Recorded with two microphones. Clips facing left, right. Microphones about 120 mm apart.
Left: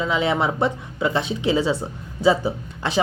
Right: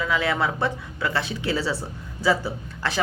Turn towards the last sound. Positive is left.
turn(degrees=20)  # may be behind; listen again after turning